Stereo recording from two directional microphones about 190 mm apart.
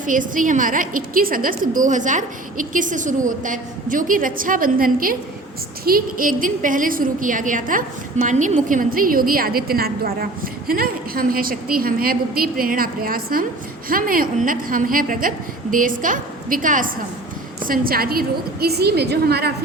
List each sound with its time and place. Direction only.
0.0 s a woman's voice: 45° right (ahead or behind)